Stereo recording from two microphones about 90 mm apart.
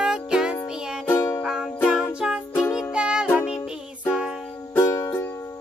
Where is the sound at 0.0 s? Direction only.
5° right (ahead or behind).